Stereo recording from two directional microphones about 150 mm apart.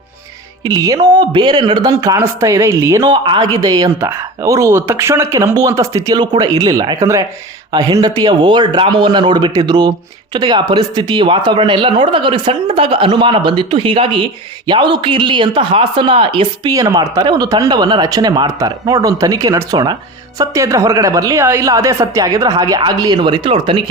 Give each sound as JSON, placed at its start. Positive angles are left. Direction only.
{"t": 0.6, "sound": "speech", "side_deg": -25}